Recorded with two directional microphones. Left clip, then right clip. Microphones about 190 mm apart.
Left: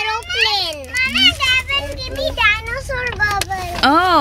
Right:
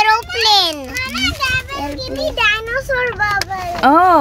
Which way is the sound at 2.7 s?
30° right (ahead or behind).